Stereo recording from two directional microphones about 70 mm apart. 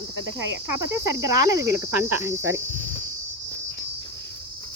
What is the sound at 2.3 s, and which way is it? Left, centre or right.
Cricket, right.